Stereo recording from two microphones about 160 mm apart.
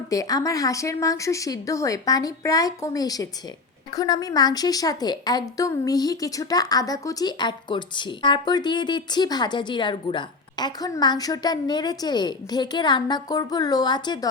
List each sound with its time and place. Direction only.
0.1 s a woman's voice: 20° left (ahead or behind)